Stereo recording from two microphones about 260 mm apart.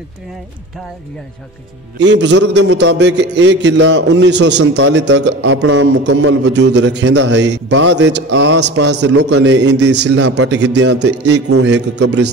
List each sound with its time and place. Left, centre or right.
2.0 s a man's voice: right
11.8 s a man's voice: right